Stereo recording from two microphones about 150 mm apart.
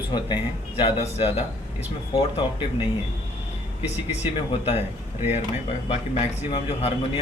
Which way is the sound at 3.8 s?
45° left (ahead or behind).